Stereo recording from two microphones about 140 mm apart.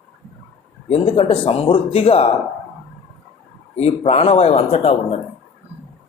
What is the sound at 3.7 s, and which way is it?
Speech, 50° left (ahead or behind).